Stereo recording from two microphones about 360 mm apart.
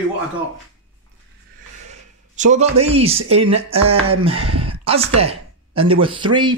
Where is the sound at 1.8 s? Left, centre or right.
Centre.